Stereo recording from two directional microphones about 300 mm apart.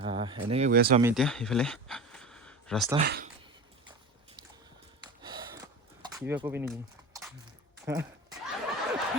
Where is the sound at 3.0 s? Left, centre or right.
Right.